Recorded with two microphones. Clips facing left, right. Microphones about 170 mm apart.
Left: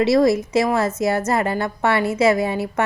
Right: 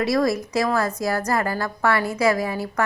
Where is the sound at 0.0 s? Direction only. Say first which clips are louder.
Left 5 dB; 25° left (ahead or behind).